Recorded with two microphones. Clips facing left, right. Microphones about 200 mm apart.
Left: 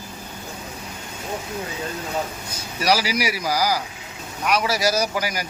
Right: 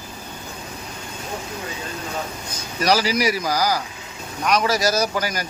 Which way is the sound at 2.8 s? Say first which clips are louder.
Right 2 dB; 10° left (ahead or behind).